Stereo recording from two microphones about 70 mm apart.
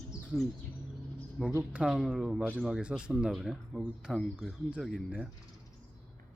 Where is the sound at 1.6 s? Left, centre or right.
Centre.